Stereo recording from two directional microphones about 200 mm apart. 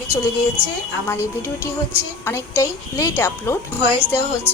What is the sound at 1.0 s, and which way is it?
A woman's voice, 15° left (ahead or behind).